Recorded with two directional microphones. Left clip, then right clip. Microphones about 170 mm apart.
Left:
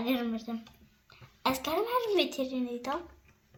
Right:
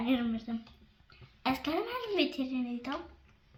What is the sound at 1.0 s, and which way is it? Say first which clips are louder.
A woman's voice: left 2 dB; 75° left (ahead or behind).